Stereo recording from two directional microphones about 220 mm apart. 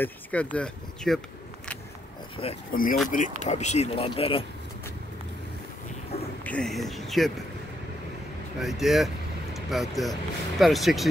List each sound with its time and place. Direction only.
0.0 s speech: 5° left (ahead or behind)
2.4 s speech: 25° left (ahead or behind)
2.7 s speech: 40° left (ahead or behind)
6.4 s speech: 5° left (ahead or behind)
8.5 s speech: centre (ahead or behind)